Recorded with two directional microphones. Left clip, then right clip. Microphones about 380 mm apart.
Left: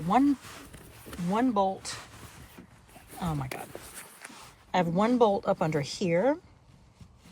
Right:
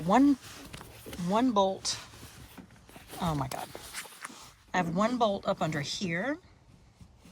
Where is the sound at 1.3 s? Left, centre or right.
Centre.